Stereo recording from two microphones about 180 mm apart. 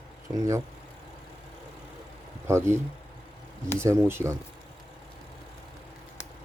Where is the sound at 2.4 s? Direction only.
15° right (ahead or behind).